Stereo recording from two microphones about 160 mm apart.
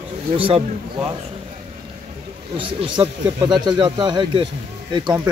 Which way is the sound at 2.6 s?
30° right (ahead or behind).